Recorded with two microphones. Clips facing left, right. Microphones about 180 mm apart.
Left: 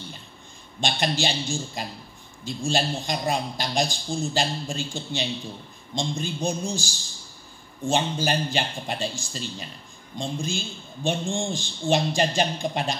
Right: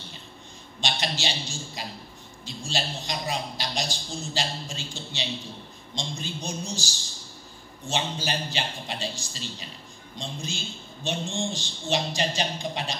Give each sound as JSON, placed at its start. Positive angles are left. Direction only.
{"t": 0.7, "sound": "a man's voice", "side_deg": 50}